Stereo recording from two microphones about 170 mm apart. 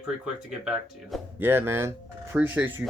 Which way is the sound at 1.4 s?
15° right (ahead or behind).